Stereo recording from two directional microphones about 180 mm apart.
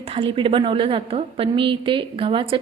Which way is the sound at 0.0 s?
30° right (ahead or behind).